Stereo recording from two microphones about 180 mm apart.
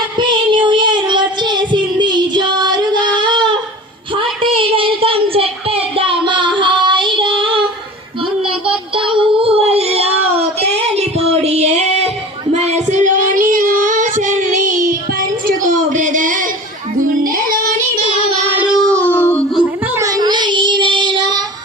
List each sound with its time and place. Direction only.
0.2 s child singing: 25° right (ahead or behind)
4.1 s a sound: 30° right (ahead or behind)
9.0 s child singing: 30° right (ahead or behind); by 14.9 s 50° right (ahead or behind)
15.4 s a sound: 45° right (ahead or behind)
18.4 s child singing: 10° right (ahead or behind); by 19.4 s 10° left (ahead or behind)
19.9 s child singing: 20° right (ahead or behind)